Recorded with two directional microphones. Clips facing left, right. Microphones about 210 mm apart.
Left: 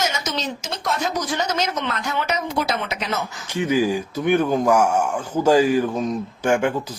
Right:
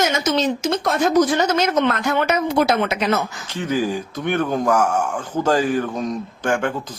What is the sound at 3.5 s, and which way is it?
Speech, 10° left (ahead or behind).